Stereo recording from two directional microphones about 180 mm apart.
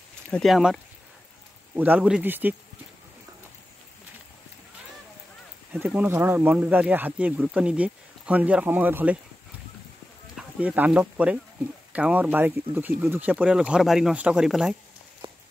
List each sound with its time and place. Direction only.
0.3 s speech: centre (ahead or behind)
1.8 s speech: 10° right (ahead or behind)
5.7 s speech: 10° right (ahead or behind)
10.3 s speech: 10° right (ahead or behind)
15.2 s run: 30° right (ahead or behind)